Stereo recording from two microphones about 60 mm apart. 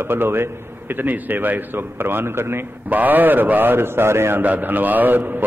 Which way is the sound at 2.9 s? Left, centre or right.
Right.